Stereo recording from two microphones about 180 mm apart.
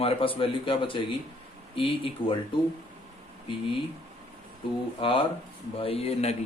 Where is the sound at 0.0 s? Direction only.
30° left (ahead or behind).